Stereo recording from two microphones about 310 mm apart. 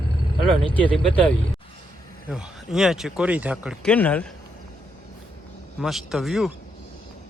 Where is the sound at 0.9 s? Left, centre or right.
Centre.